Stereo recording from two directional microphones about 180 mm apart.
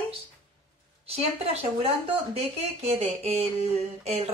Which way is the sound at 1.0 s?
35° right (ahead or behind).